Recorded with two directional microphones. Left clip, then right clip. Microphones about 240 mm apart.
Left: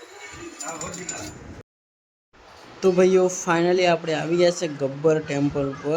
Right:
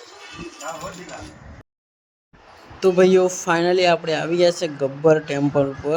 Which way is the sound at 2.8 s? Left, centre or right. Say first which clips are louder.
Right 3 dB; centre.